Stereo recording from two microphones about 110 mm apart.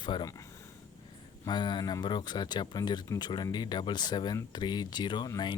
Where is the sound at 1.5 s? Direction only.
45° left (ahead or behind).